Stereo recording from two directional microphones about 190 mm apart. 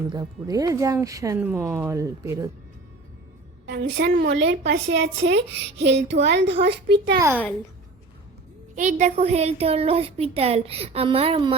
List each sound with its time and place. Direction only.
0.1 s speech: 20° right (ahead or behind)
3.7 s a woman's voice: 60° right (ahead or behind)
7.2 s speech: 15° right (ahead or behind)
8.7 s speech: 40° right (ahead or behind)